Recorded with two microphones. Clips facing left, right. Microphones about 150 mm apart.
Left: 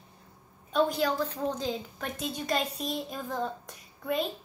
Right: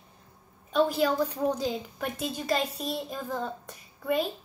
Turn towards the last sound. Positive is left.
turn(degrees=0)  # may be behind; listen again after turning